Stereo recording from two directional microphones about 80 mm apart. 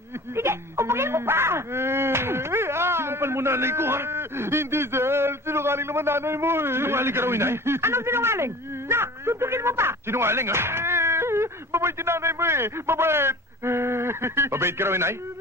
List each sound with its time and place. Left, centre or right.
0.4 s speech: right